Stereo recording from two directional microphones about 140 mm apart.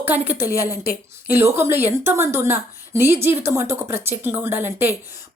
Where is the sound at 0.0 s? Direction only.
15° right (ahead or behind).